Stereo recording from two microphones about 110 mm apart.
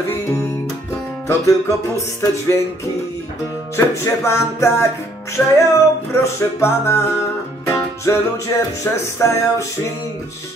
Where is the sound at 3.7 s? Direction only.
20° left (ahead or behind).